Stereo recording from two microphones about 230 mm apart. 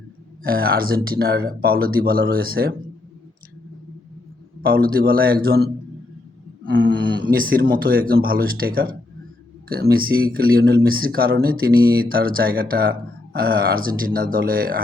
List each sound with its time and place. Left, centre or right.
0.4 s speech: right
4.6 s speech: right
6.7 s a sound: right
7.3 s speech: right